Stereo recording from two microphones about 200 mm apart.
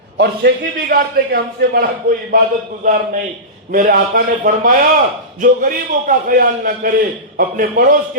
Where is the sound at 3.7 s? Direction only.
45° right (ahead or behind).